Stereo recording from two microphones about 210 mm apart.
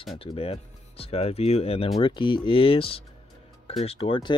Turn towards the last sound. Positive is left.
turn(degrees=25)  # may be behind; listen again after turning